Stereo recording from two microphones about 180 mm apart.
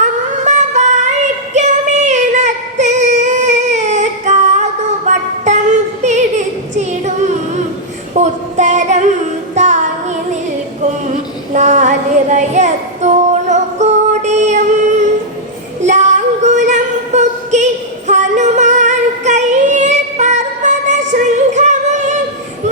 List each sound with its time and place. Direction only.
0.0 s music: 40° right (ahead or behind)
8.1 s a sound: 40° right (ahead or behind)
9.6 s music: 40° right (ahead or behind)
11.5 s child singing: 40° right (ahead or behind)
15.8 s female singing: 40° right (ahead or behind)
21.1 s music: 40° right (ahead or behind)